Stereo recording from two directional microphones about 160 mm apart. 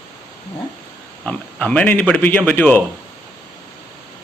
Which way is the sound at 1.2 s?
10° left (ahead or behind).